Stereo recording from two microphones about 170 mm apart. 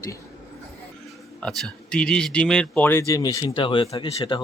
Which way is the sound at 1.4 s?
5° left (ahead or behind).